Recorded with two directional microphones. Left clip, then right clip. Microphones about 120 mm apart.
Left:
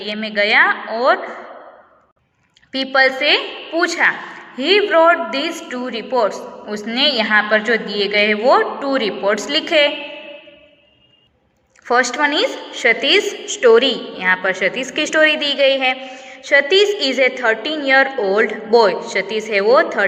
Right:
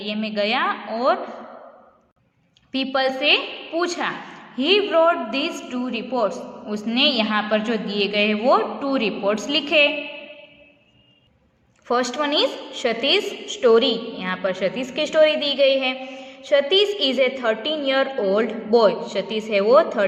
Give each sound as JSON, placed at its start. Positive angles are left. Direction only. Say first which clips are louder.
{"t": 0.2, "sound": "a woman's voice", "louder": "left 9 dB", "side_deg": -30}
{"t": 2.7, "sound": "a woman's voice", "louder": "left 7 dB", "side_deg": -25}
{"t": 11.9, "sound": "a woman's voice", "louder": "left 6 dB", "side_deg": -15}